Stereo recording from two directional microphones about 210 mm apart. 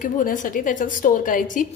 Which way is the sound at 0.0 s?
40° left (ahead or behind).